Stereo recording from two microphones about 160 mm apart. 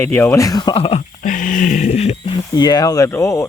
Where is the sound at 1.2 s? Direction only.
55° left (ahead or behind); by 2.4 s 35° left (ahead or behind).